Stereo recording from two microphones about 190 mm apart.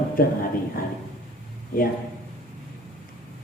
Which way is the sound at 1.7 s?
50° left (ahead or behind).